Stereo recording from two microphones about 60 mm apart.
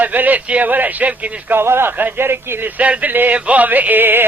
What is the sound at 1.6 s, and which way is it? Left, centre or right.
Speech, right.